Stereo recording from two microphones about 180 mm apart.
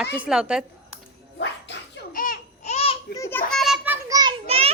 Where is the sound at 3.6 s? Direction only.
Centre (ahead or behind).